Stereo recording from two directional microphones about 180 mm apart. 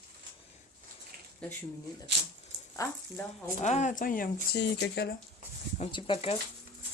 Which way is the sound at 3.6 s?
40° left (ahead or behind).